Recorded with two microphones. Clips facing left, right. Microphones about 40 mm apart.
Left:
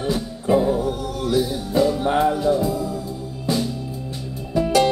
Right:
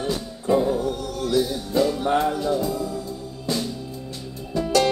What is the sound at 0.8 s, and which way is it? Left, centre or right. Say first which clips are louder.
Music: left 2 dB; left.